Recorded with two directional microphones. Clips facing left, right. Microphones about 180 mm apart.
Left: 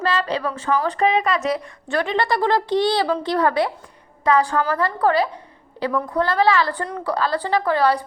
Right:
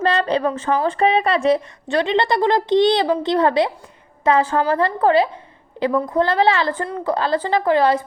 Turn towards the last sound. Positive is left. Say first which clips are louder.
# right 2 dB
turn(degrees=-20)  # may be behind; listen again after turning